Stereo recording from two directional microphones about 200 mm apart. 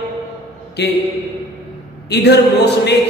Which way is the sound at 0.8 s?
60° left (ahead or behind).